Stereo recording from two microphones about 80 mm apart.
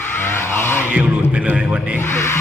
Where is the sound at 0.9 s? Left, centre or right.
Centre.